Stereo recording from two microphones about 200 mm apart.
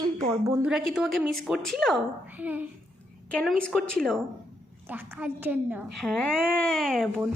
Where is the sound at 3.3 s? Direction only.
5° left (ahead or behind).